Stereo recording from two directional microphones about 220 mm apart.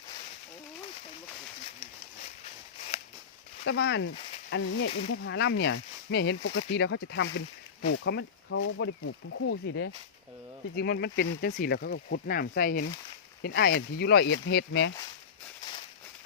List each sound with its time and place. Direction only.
2.4 s a sound: 30° left (ahead or behind)
3.7 s speech: 50° left (ahead or behind)
4.9 s speech: 25° left (ahead or behind)
5.2 s speech: 55° left (ahead or behind)
8.5 s speech: 65° left (ahead or behind)
10.8 s speech: 45° left (ahead or behind)